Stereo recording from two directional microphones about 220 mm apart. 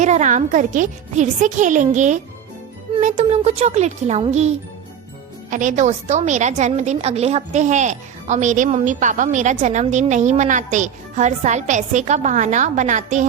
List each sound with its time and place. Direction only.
0.0 s a woman's voice: 35° right (ahead or behind)